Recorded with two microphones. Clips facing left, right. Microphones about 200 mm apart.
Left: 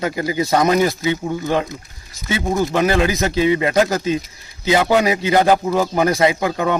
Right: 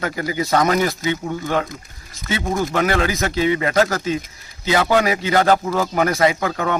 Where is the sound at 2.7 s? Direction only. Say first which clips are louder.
Left 3 dB; 20° left (ahead or behind).